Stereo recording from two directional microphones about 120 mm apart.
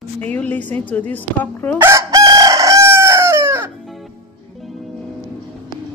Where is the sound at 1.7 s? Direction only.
25° right (ahead or behind).